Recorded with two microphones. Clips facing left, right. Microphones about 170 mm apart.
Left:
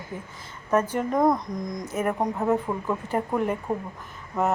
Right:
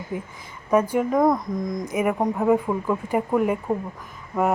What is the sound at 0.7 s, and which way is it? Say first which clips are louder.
Speech: right 4 dB; 10° right (ahead or behind).